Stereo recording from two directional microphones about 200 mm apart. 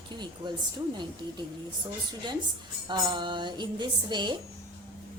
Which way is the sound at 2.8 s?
25° right (ahead or behind).